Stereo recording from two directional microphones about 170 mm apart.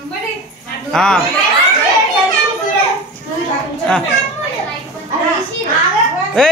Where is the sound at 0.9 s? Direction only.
5° left (ahead or behind).